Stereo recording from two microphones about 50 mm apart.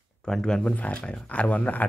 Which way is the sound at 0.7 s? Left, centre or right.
Left.